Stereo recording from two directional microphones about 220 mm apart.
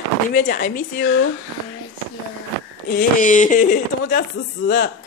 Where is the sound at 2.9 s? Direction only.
35° left (ahead or behind).